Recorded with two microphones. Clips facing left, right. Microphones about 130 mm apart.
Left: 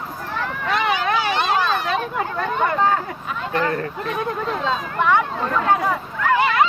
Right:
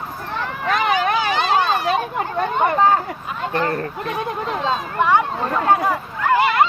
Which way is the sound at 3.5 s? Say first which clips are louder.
Even; 35° right (ahead or behind).